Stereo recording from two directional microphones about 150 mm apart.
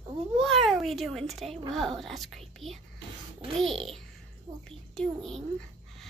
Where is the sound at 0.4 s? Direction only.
Centre (ahead or behind).